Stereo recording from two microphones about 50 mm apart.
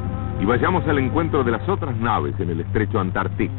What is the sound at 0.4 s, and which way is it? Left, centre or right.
Speech, right.